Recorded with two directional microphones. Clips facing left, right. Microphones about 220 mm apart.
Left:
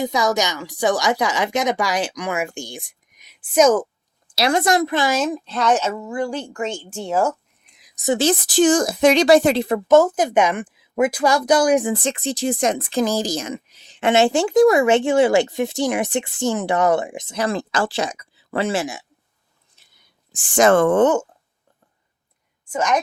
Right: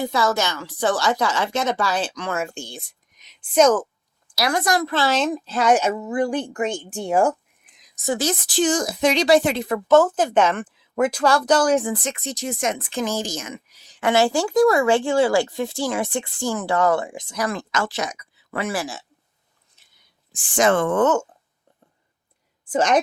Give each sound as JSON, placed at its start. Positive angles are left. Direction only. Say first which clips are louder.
{"t": 0.0, "sound": "a woman's voice", "louder": "left 1 dB", "side_deg": 15}
{"t": 4.4, "sound": "speech", "louder": "left 4 dB", "side_deg": 25}
{"t": 5.2, "sound": "speech", "louder": "even", "side_deg": 0}
{"t": 7.6, "sound": "a sound", "louder": "left 1 dB", "side_deg": 0}
{"t": 8.0, "sound": "speech", "louder": "left 5 dB", "side_deg": 25}
{"t": 8.4, "sound": "speech", "louder": "left 5 dB", "side_deg": 50}
{"t": 9.9, "sound": "a woman's voice", "louder": "left 1 dB", "side_deg": 15}
{"t": 11.9, "sound": "speech", "louder": "left 5 dB", "side_deg": 30}
{"t": 20.3, "sound": "speech", "louder": "left 4 dB", "side_deg": 45}
{"t": 21.0, "sound": "a woman's voice", "louder": "left 3 dB", "side_deg": 10}
{"t": 22.7, "sound": "a woman's voice", "louder": "right 2 dB", "side_deg": -30}